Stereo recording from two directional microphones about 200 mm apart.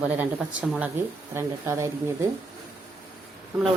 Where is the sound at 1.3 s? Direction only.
10° right (ahead or behind).